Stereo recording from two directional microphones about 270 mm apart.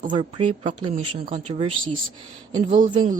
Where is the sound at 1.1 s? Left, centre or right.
Right.